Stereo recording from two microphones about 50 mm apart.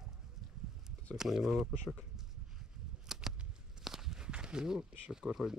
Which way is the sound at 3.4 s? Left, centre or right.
Centre.